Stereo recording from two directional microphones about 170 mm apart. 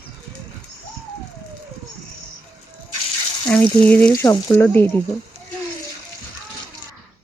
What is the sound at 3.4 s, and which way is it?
Speech, 10° left (ahead or behind).